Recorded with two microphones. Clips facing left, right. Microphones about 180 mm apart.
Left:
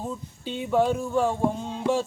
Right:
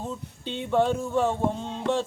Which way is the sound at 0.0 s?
5° left (ahead or behind).